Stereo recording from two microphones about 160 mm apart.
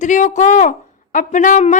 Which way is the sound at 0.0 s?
50° left (ahead or behind).